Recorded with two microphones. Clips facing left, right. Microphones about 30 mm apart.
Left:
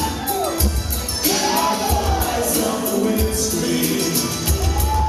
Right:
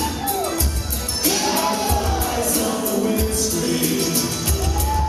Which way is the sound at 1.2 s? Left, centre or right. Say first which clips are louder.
Left 2 dB; centre.